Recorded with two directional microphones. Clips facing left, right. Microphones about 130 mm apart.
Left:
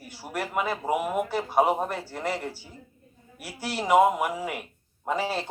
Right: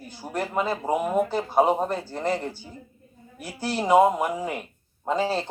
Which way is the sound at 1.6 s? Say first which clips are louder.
Right 2 dB; 20° right (ahead or behind).